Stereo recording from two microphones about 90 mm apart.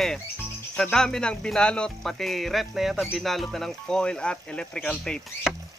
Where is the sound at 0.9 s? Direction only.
5° left (ahead or behind).